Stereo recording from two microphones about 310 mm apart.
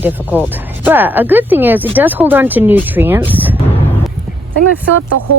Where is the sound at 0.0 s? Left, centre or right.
Centre.